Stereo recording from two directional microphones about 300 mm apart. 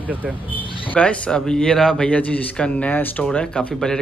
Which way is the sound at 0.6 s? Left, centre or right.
Centre.